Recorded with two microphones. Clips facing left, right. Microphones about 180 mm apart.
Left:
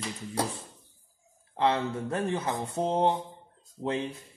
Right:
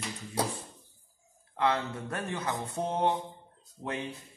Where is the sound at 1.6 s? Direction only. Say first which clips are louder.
Left 3 dB; 25° left (ahead or behind).